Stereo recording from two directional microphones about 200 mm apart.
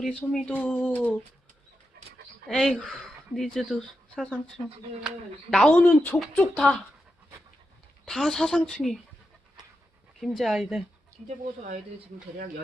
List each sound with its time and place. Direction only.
0.0 s speech: 5° left (ahead or behind)
2.5 s speech: 5° left (ahead or behind)
8.0 s speech: centre (ahead or behind)
10.2 s speech: centre (ahead or behind)